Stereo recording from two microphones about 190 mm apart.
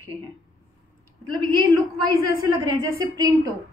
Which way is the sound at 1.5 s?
20° right (ahead or behind).